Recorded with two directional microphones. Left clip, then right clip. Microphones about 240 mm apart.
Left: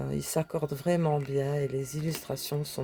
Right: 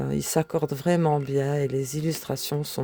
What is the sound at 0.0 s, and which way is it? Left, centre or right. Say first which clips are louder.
Speech: right 6 dB; right.